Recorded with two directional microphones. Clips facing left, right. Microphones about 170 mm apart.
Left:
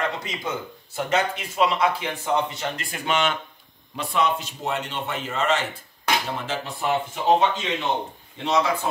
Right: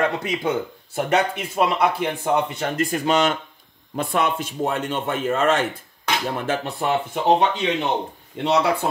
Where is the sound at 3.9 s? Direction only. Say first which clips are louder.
Right 2 dB; 55° right (ahead or behind).